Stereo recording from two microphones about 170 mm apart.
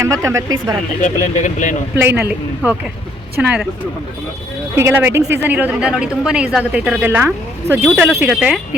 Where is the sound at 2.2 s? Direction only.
10° right (ahead or behind).